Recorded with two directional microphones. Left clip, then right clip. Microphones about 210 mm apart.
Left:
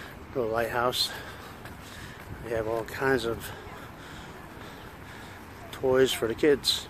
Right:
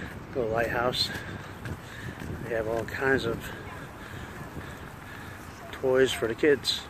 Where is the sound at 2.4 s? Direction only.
15° left (ahead or behind).